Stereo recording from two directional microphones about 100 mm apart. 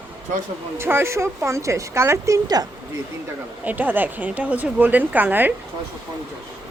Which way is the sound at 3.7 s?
15° right (ahead or behind).